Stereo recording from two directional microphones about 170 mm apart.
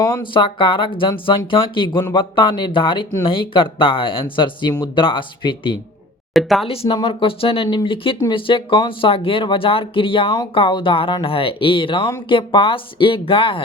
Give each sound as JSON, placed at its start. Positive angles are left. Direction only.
{"t": 0.0, "sound": "speech", "side_deg": 25}
{"t": 6.3, "sound": "speech", "side_deg": 0}
{"t": 6.7, "sound": "speech", "side_deg": 30}